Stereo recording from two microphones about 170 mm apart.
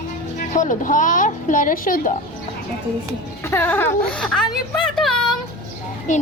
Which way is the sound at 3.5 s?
10° left (ahead or behind).